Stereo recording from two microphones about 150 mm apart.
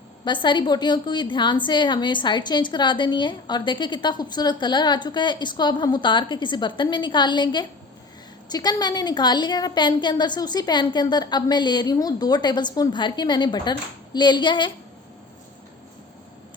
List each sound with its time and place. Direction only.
0.3 s a woman's voice: 30° left (ahead or behind)